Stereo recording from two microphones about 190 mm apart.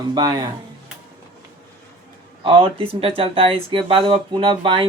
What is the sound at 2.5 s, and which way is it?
Speech, 30° right (ahead or behind).